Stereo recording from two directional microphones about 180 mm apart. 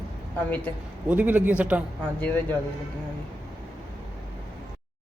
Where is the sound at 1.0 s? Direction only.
10° right (ahead or behind).